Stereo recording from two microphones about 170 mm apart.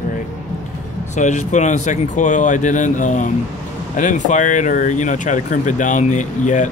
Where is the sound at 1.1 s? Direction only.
45° left (ahead or behind).